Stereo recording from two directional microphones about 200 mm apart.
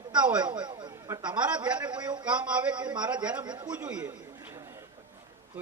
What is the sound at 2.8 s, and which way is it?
A man's voice, 5° right (ahead or behind).